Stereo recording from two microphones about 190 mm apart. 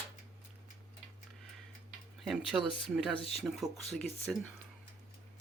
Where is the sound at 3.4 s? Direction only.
Centre (ahead or behind).